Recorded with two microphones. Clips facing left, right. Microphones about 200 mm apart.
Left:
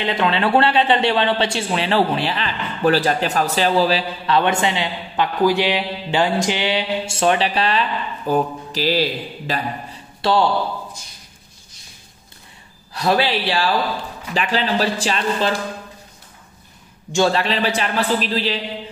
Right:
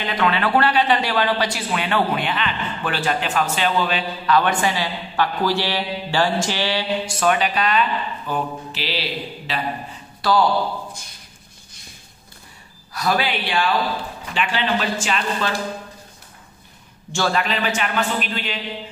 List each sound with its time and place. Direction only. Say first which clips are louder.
0.0 s a man's voice: left 2 dB; 25° left (ahead or behind)
8.3 s mantra: left 7 dB; 45° left (ahead or behind)
10.2 s a man's voice: left 1 dB; 25° left (ahead or behind)
12.9 s a man's voice: left 3 dB; 30° left (ahead or behind)
17.1 s a man's voice: left 4 dB; 25° left (ahead or behind)